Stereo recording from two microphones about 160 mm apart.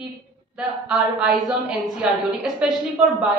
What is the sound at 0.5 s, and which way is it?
Speech, 5° right (ahead or behind).